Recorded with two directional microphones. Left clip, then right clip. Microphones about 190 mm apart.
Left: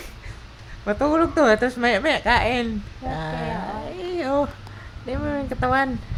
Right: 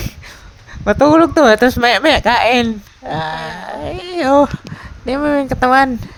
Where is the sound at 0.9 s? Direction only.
45° right (ahead or behind).